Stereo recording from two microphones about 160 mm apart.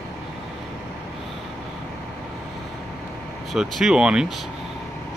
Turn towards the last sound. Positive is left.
turn(degrees=0)  # may be behind; listen again after turning